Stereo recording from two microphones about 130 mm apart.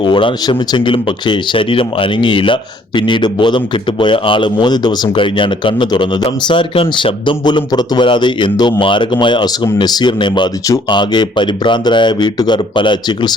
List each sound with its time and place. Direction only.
0.0 s speech: 40° left (ahead or behind)